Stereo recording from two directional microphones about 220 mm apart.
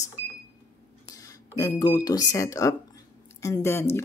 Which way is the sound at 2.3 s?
15° left (ahead or behind).